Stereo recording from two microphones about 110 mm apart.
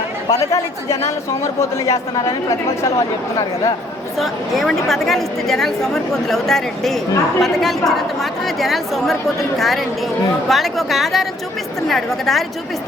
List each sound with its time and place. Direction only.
0.3 s speech: 30° left (ahead or behind)
4.2 s a woman's voice: centre (ahead or behind)